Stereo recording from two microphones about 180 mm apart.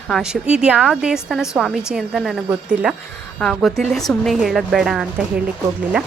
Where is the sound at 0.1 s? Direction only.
5° right (ahead or behind).